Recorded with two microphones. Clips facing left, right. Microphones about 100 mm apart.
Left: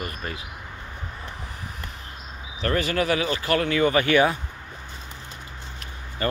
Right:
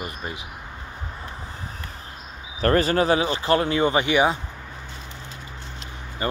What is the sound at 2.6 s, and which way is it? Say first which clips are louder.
Speech: right 5 dB; 40° right (ahead or behind).